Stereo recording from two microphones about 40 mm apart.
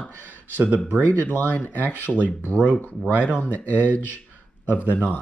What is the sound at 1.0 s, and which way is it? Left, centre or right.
Speech, left.